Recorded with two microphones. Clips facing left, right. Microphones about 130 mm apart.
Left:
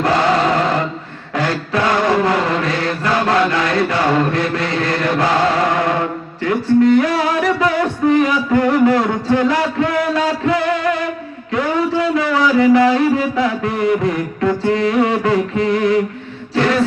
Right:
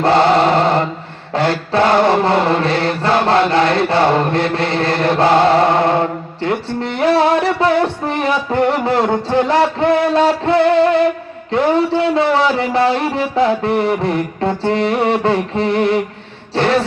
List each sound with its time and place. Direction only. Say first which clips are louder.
0.0 s chant: right 3 dB; 30° right (ahead or behind)
1.3 s mantra: right 3 dB; 30° right (ahead or behind)
11.5 s a man's voice: right 3 dB; 30° right (ahead or behind)
16.6 s a sound: right 1 dB; 30° right (ahead or behind)